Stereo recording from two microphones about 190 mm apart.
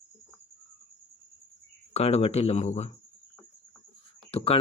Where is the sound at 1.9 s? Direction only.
35° left (ahead or behind).